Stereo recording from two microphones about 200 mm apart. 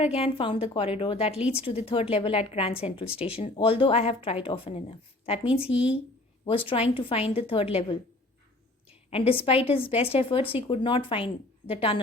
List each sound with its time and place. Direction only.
0.0 s speech: 30° left (ahead or behind)
1.4 s speech: 5° right (ahead or behind)
1.6 s speech: 25° left (ahead or behind)
5.7 s speech: 5° right (ahead or behind)
6.7 s speech: 30° left (ahead or behind)
9.0 s speech: 30° left (ahead or behind)